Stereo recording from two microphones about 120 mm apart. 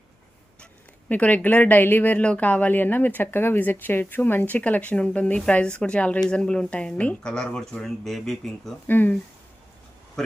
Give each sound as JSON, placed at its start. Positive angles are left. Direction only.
{"t": 0.6, "sound": "speech", "side_deg": 10}
{"t": 8.9, "sound": "speech", "side_deg": 15}